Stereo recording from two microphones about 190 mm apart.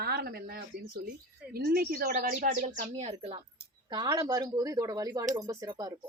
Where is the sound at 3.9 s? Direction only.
20° right (ahead or behind).